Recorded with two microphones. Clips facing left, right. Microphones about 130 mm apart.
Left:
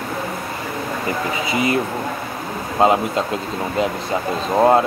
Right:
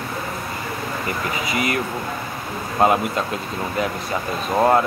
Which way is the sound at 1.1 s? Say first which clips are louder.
Left 3 dB; 25° left (ahead or behind).